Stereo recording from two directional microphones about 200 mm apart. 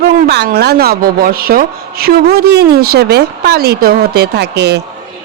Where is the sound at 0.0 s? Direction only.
50° right (ahead or behind).